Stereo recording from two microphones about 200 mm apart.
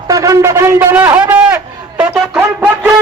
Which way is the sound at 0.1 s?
15° right (ahead or behind).